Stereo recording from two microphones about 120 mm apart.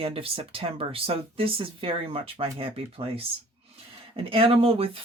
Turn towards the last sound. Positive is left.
turn(degrees=-50)  # may be behind; listen again after turning